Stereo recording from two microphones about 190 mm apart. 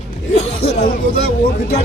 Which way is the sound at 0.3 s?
35° left (ahead or behind).